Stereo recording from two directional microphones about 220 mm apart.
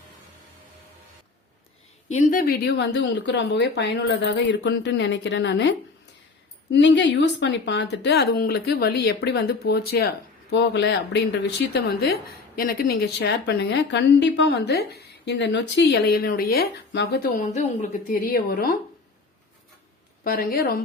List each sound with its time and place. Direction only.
2.0 s a woman's voice: 35° left (ahead or behind); by 17.2 s 50° left (ahead or behind)
17.4 s a woman's voice: 35° left (ahead or behind)
20.2 s a woman's voice: 40° left (ahead or behind)